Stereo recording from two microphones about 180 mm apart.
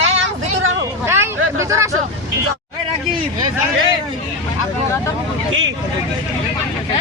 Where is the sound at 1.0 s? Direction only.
15° right (ahead or behind).